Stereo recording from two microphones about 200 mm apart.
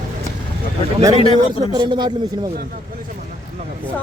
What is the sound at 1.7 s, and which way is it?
Speech, 20° right (ahead or behind).